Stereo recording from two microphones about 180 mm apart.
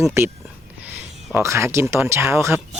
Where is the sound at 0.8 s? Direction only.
10° right (ahead or behind).